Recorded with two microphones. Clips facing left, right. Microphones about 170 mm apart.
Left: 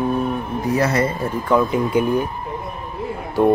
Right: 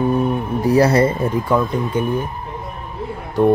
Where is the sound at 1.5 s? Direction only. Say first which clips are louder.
Left 6 dB; centre (ahead or behind).